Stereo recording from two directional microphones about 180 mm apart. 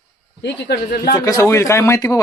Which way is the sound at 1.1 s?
20° left (ahead or behind).